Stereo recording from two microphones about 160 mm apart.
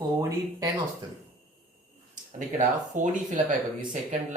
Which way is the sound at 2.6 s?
50° right (ahead or behind).